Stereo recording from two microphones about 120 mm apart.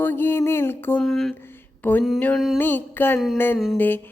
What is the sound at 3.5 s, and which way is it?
Speech, centre (ahead or behind).